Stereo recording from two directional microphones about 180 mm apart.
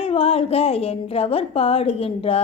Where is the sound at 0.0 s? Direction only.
30° left (ahead or behind).